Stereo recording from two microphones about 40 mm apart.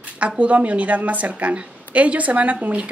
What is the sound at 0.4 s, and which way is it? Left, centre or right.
Speech, right.